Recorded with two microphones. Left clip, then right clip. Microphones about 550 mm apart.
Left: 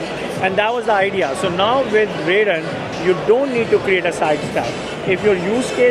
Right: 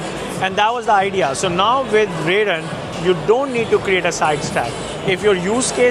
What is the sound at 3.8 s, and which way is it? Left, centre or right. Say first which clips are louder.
Speech: even; right.